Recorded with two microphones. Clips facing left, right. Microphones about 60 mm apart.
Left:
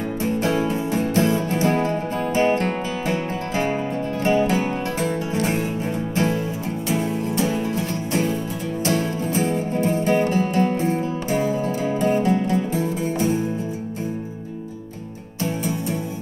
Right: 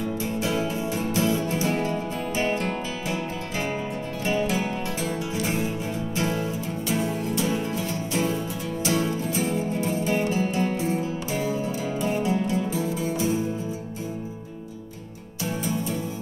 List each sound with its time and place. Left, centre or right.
0.2 s music: left
7.0 s music: left
9.3 s music: left